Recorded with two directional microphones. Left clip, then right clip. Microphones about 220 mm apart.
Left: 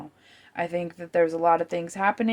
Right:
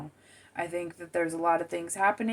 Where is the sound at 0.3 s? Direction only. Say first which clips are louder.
Left 5 dB; 45° left (ahead or behind).